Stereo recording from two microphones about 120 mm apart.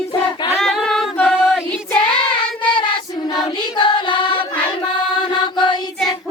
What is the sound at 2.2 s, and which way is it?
Child singing, 45° left (ahead or behind).